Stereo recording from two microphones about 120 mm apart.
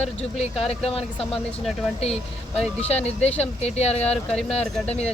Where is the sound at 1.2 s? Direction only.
5° left (ahead or behind).